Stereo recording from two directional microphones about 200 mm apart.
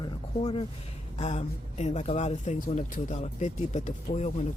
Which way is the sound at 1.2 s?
35° left (ahead or behind).